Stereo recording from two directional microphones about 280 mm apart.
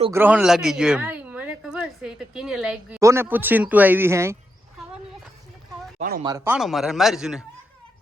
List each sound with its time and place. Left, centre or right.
0.0 s speech: centre
6.0 s speech: right
6.2 s speech: centre